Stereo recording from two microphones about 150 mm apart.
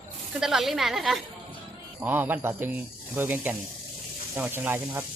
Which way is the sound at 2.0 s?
15° right (ahead or behind).